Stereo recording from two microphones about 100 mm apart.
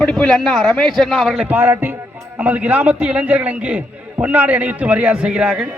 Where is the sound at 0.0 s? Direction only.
15° left (ahead or behind).